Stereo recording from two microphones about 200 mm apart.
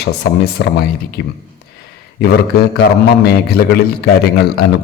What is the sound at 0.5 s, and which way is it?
Speech, 50° left (ahead or behind).